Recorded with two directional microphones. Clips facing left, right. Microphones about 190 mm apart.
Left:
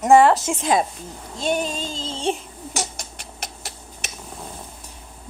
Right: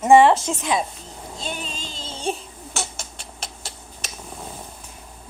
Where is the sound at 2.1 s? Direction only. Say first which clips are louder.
Left 2 dB; 25° left (ahead or behind).